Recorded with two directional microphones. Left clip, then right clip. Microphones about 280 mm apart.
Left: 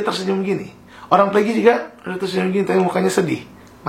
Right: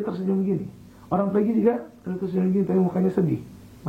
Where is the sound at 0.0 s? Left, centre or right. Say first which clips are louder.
Left 7 dB; centre.